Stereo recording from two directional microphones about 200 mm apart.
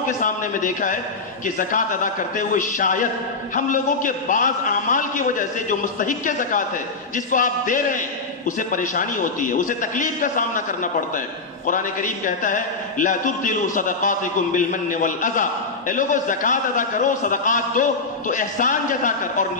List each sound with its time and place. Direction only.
0.2 s a man's voice: 40° left (ahead or behind)